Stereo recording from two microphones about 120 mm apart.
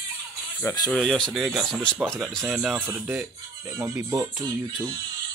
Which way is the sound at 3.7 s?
20° right (ahead or behind).